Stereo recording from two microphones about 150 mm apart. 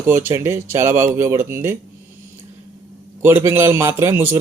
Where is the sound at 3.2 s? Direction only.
15° right (ahead or behind).